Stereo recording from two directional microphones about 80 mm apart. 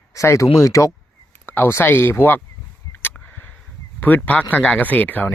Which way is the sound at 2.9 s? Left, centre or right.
Left.